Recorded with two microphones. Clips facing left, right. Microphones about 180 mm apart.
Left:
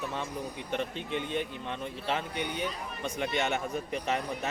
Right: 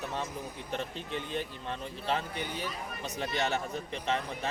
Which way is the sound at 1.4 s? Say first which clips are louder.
Left 2 dB; centre (ahead or behind).